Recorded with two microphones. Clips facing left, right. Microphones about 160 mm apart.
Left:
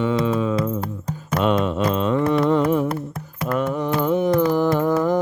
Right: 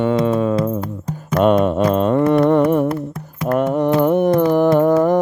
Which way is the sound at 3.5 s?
55° right (ahead or behind).